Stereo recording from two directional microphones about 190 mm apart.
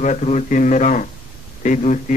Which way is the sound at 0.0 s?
35° left (ahead or behind).